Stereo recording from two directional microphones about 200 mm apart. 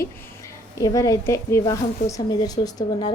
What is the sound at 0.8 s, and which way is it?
A woman's voice, 15° left (ahead or behind).